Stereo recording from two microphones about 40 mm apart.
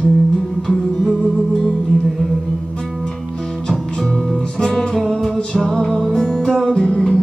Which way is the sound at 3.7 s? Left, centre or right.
Centre.